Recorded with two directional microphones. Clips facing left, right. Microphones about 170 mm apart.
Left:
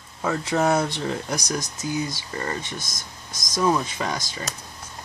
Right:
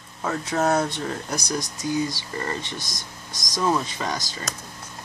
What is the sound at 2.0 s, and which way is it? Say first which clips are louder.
Speech: even; 15° left (ahead or behind).